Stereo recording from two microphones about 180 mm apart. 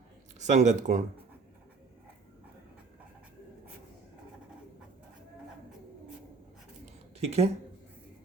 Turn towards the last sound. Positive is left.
turn(degrees=-35)  # may be behind; listen again after turning